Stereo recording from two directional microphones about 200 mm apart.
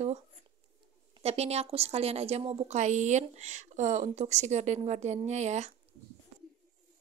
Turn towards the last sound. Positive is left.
turn(degrees=-35)  # may be behind; listen again after turning